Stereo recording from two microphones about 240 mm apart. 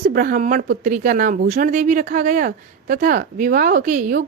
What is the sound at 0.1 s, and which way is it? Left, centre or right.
Speech, right.